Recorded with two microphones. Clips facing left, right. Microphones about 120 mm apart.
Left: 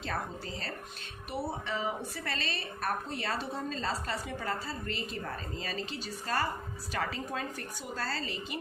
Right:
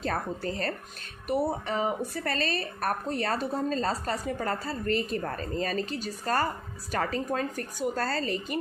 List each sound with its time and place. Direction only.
0.0 s speech: 55° right (ahead or behind)